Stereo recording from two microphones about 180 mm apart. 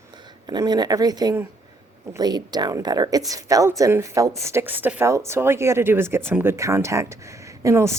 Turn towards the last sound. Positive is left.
turn(degrees=-15)  # may be behind; listen again after turning